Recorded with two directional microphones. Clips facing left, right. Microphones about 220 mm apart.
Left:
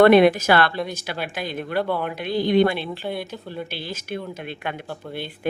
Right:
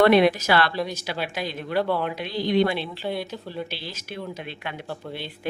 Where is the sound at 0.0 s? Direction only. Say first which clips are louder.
Left 4 dB; 50° left (ahead or behind).